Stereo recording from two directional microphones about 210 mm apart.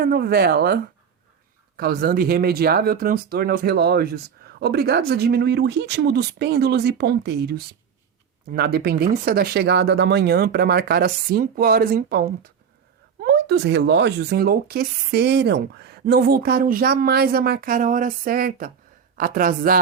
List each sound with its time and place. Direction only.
0.0 s speech: 45° right (ahead or behind)